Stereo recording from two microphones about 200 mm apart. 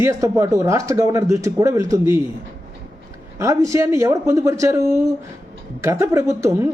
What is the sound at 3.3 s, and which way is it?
A man's voice, 15° right (ahead or behind).